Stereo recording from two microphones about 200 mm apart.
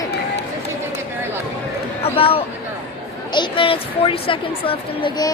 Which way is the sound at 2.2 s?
30° left (ahead or behind).